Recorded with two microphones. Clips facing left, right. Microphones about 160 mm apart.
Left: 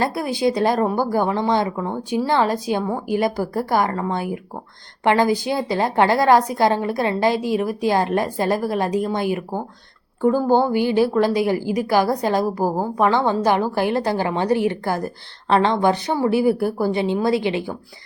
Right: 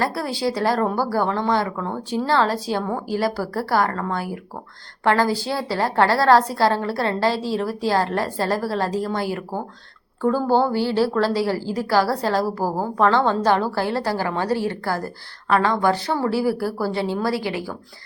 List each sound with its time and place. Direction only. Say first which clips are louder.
0.0 s a woman's voice: left 3 dB; 20° left (ahead or behind)